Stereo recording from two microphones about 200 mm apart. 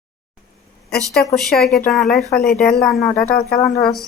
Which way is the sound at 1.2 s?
Centre (ahead or behind).